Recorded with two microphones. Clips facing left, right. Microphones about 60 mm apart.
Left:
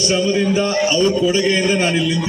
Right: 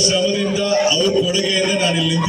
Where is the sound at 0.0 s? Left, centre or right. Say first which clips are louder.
Left 1 dB; left.